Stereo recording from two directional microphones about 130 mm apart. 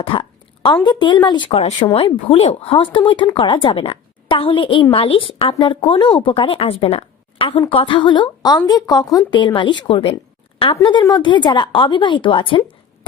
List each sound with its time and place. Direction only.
0.0 s a sound: 45° left (ahead or behind)
0.9 s a woman's voice: 35° left (ahead or behind)
11.0 s a woman's voice: 35° left (ahead or behind)